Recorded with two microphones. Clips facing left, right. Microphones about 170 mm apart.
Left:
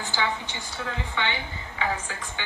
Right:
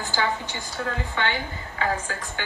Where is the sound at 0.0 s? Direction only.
45° right (ahead or behind).